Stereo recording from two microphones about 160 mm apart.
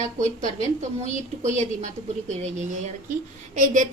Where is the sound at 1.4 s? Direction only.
50° right (ahead or behind).